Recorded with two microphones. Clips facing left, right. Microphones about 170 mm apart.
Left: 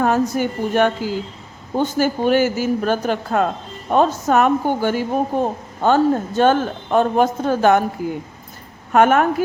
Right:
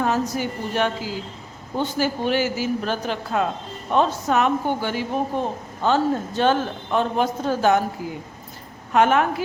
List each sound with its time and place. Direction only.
0.0 s speech: 50° left (ahead or behind)